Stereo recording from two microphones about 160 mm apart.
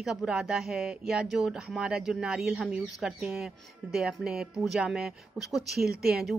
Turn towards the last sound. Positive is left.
turn(degrees=-5)  # may be behind; listen again after turning